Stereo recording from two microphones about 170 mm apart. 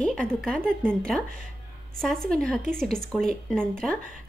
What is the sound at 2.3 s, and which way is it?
Speech, 5° left (ahead or behind).